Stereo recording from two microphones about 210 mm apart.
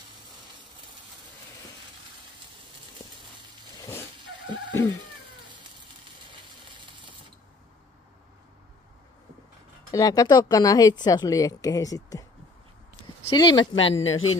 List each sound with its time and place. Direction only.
3.8 s vehicle: 10° left (ahead or behind)
6.7 s printer: 20° right (ahead or behind)
9.8 s a woman's voice: 15° left (ahead or behind)
13.3 s speech: 20° left (ahead or behind)
13.7 s a woman's voice: 65° left (ahead or behind)